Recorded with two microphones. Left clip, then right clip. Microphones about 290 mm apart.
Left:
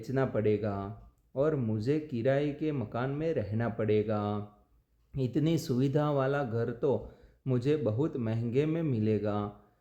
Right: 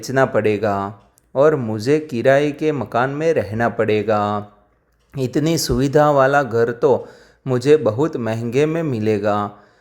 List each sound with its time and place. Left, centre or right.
0.0 s speech: right